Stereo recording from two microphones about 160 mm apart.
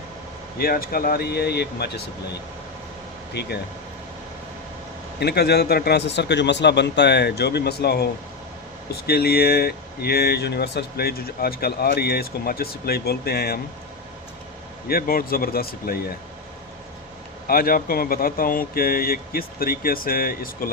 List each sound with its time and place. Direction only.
0.6 s speech: 65° left (ahead or behind); by 2.0 s 90° left
3.4 s a man's voice: 90° left
5.2 s a man's voice: 90° left
14.8 s speech: 70° left (ahead or behind)
17.4 s speech: 65° left (ahead or behind)